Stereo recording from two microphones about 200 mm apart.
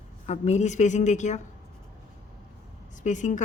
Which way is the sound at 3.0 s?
40° left (ahead or behind).